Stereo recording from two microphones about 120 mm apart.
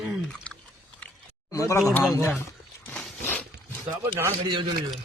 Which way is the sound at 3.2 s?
15° left (ahead or behind).